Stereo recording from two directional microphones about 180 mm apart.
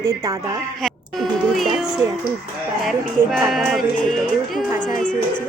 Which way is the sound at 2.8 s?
Centre (ahead or behind).